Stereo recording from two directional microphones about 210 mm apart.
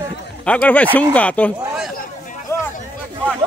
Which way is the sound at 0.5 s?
5° left (ahead or behind).